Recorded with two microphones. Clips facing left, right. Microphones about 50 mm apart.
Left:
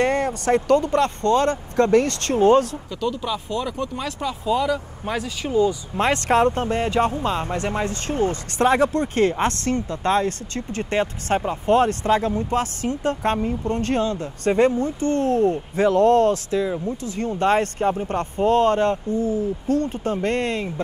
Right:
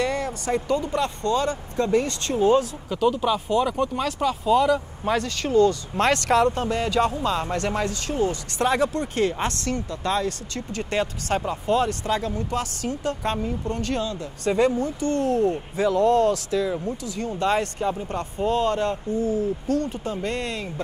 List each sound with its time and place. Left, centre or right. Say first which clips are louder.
0.0 s speech: left 5 dB; left
2.9 s speech: right 4 dB; centre
4.0 s speech: right 3 dB; centre
6.0 s speech: left 1 dB; left